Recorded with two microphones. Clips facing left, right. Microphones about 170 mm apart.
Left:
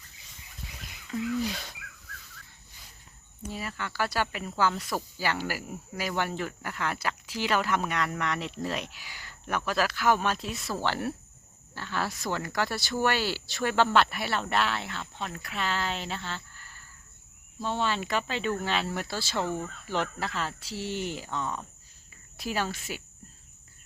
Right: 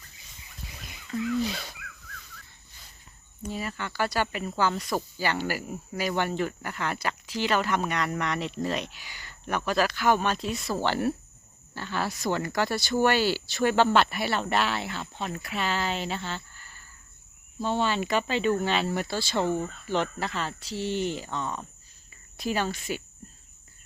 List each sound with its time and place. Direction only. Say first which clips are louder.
1.1 s a sound: right 2 dB; 10° left (ahead or behind)
3.4 s speech: right 3 dB; 5° left (ahead or behind)
19.5 s speech: right 5 dB; 25° right (ahead or behind)
19.9 s speech: right 2 dB; 5° left (ahead or behind)